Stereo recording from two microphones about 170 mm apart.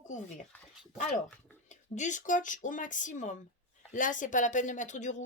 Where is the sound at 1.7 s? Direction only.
45° left (ahead or behind).